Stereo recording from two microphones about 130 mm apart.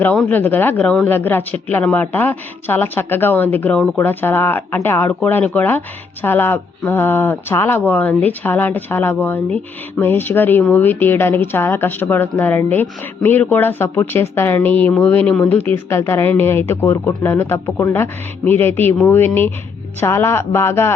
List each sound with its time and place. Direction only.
0.0 s speech: 10° left (ahead or behind)